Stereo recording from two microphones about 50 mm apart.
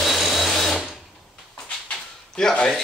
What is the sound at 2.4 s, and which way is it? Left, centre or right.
Speech, centre.